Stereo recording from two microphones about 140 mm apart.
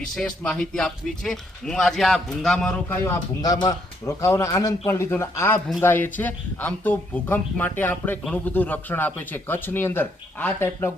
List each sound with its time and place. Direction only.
0.2 s speech: 5° left (ahead or behind)
3.4 s a man's voice: 25° left (ahead or behind)